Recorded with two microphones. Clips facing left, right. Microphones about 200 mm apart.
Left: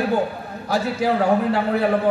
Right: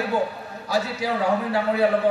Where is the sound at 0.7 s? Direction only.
50° left (ahead or behind).